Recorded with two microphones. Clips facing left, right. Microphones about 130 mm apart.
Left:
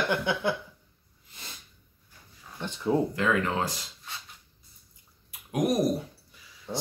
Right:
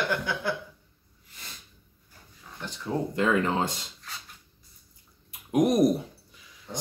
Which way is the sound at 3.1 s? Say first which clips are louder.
Right 2 dB; 25° right (ahead or behind).